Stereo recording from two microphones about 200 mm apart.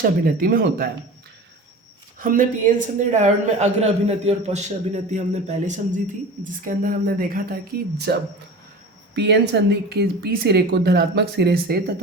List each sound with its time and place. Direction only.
0.0 s speech: 45° right (ahead or behind)
2.1 s speech: 45° right (ahead or behind)
9.1 s speech: 60° right (ahead or behind)